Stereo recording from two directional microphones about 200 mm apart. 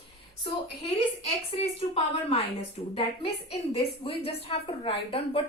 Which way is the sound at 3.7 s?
30° left (ahead or behind).